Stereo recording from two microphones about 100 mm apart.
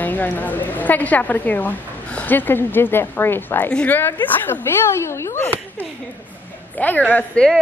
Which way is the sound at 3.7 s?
10° left (ahead or behind).